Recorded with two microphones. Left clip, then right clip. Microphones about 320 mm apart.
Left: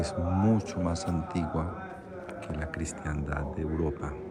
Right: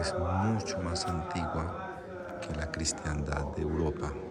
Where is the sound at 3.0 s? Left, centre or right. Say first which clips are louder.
Even; centre.